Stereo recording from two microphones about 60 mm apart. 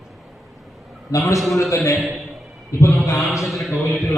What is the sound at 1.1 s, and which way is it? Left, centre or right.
Speech, left.